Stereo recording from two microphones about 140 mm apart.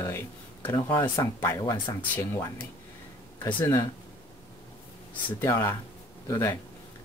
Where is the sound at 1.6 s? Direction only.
30° left (ahead or behind).